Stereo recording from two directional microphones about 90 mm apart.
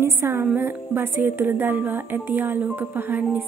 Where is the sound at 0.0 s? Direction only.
30° right (ahead or behind).